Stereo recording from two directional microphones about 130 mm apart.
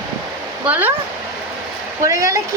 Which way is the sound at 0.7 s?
15° right (ahead or behind).